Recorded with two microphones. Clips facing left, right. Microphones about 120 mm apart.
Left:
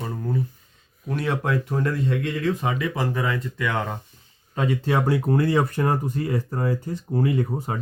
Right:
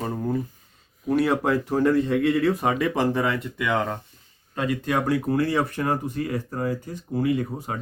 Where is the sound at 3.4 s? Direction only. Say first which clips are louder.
Right 2 dB; 10° right (ahead or behind).